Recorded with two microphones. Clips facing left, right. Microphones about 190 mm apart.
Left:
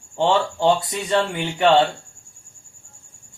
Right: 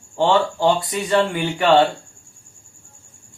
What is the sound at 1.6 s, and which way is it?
Speech, 25° left (ahead or behind).